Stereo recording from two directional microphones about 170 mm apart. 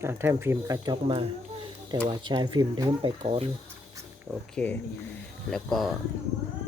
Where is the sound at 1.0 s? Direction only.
30° right (ahead or behind).